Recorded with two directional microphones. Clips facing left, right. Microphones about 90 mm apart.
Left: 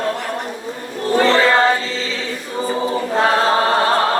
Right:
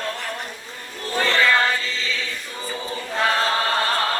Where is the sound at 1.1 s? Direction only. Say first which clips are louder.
Left 6 dB; 35° left (ahead or behind).